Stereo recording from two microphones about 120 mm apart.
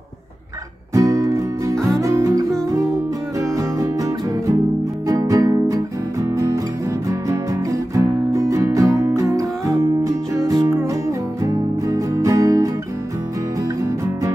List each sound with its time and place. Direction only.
0.9 s music: 25° right (ahead or behind)
7.9 s music: 25° right (ahead or behind)